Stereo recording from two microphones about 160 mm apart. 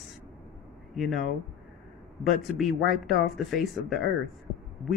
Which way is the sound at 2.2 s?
Centre (ahead or behind).